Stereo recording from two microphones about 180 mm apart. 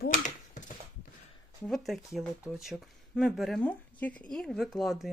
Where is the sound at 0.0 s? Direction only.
45° left (ahead or behind).